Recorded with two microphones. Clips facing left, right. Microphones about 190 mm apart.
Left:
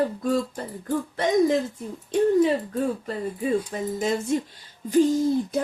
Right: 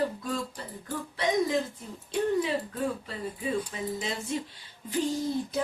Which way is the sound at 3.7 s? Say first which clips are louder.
Left 8 dB; 45° left (ahead or behind).